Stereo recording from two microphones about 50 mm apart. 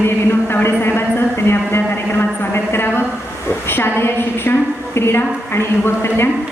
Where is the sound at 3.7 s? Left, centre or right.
Left.